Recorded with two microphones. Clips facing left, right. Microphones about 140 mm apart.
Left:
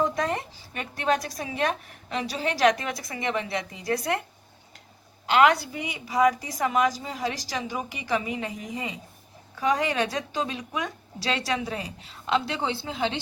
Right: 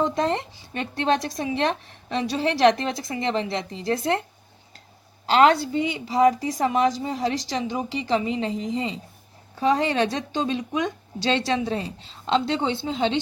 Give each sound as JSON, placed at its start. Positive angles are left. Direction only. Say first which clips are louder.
{"t": 0.0, "sound": "speech", "louder": "right 3 dB", "side_deg": -25}
{"t": 5.2, "sound": "speech", "louder": "right 3 dB", "side_deg": -30}